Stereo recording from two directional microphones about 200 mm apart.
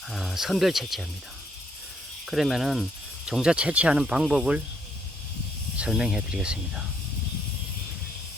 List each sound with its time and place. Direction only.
0.1 s speech: centre (ahead or behind)
2.2 s speech: centre (ahead or behind)
5.7 s speech: 5° right (ahead or behind)